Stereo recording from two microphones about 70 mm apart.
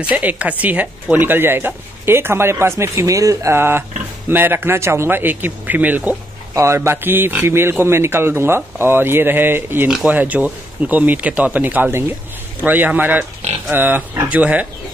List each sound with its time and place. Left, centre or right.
0.1 s a man's voice: right
3.1 s speech: right
3.5 s a man's voice: right
6.5 s a man's voice: right